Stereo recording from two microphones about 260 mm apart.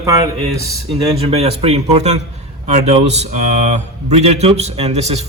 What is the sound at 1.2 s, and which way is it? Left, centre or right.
A man's voice, right.